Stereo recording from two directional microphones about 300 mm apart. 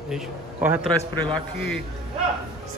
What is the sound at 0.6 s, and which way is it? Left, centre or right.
Speech, centre.